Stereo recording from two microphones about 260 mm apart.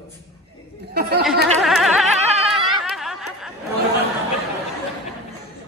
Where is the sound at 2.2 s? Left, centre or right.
Centre.